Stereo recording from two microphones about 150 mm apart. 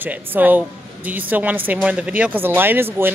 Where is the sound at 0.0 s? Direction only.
10° right (ahead or behind).